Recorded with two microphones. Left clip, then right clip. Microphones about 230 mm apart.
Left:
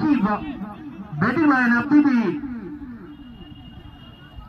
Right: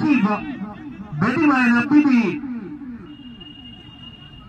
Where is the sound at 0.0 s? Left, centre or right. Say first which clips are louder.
Right 2 dB; centre.